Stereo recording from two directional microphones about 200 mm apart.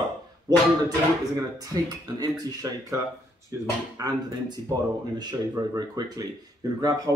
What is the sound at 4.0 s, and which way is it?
Speech, 20° right (ahead or behind).